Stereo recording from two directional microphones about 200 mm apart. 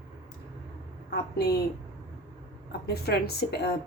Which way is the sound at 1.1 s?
55° left (ahead or behind).